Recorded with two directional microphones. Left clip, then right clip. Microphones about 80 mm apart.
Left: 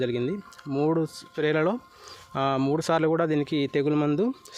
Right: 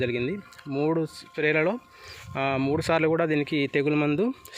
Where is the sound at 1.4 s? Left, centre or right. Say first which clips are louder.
Right 1 dB; left.